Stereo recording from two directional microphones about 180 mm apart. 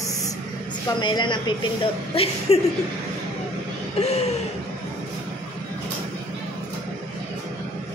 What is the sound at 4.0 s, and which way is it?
Speech, 35° left (ahead or behind).